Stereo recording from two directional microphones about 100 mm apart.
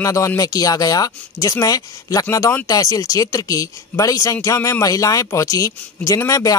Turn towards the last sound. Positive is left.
turn(degrees=35)  # may be behind; listen again after turning